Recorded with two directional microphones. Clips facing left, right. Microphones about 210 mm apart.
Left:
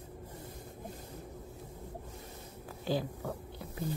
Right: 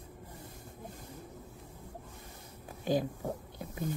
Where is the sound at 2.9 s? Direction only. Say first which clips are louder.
Right 3 dB; 15° right (ahead or behind).